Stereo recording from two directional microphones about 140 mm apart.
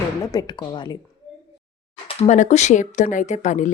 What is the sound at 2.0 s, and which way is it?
Speech, 60° left (ahead or behind).